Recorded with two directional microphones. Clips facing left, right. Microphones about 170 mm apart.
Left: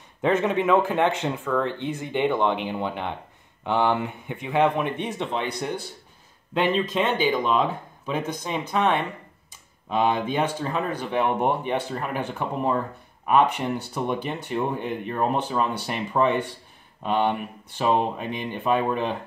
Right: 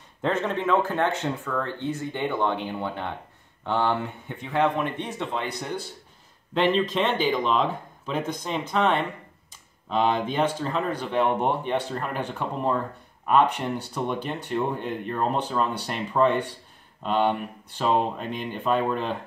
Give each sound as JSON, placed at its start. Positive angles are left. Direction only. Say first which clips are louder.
{"t": 0.2, "sound": "speech", "louder": "left 4 dB", "side_deg": 15}
{"t": 13.9, "sound": "speech", "louder": "left 1 dB", "side_deg": 10}